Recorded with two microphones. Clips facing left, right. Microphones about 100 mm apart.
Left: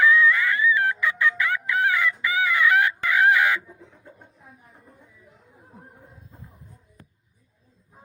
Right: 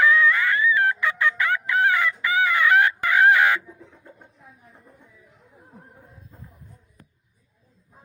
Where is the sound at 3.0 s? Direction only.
25° right (ahead or behind).